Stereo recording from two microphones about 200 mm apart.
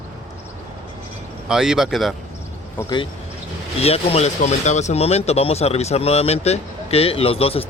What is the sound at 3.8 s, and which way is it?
Speech, 30° left (ahead or behind).